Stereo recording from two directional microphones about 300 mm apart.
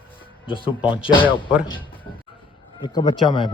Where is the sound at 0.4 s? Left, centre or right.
Centre.